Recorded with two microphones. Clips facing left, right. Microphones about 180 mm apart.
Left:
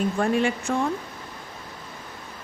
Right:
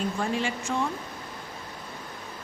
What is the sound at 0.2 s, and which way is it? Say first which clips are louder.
Speech: left 6 dB; 55° left (ahead or behind).